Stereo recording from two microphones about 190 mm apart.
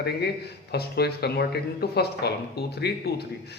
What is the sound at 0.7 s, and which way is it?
A man's voice, 60° left (ahead or behind).